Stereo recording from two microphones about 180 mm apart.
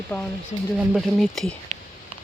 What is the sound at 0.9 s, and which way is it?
Speech, centre (ahead or behind).